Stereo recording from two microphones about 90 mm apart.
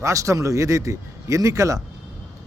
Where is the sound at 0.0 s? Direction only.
35° right (ahead or behind).